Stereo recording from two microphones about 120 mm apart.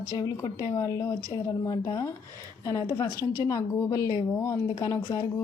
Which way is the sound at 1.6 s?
35° left (ahead or behind).